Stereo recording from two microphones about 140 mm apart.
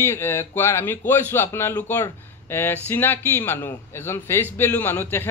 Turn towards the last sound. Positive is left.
turn(degrees=15)  # may be behind; listen again after turning